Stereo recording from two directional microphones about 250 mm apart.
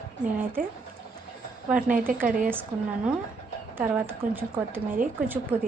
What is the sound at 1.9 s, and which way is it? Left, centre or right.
Speech, right.